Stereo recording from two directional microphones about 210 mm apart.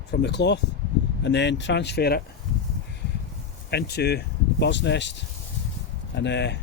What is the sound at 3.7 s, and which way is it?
Speech, 50° left (ahead or behind).